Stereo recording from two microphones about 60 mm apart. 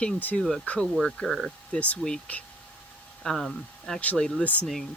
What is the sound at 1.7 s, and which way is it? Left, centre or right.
Speech, left.